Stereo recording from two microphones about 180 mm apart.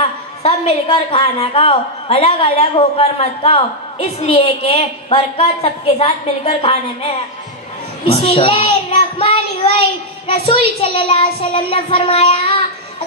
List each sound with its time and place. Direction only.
0.0 s a woman's voice: 35° left (ahead or behind)
9.2 s child singing: 30° left (ahead or behind)
9.8 s a woman's voice: 30° left (ahead or behind)